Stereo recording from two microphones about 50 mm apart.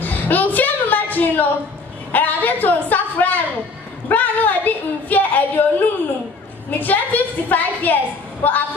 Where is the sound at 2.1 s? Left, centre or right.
Left.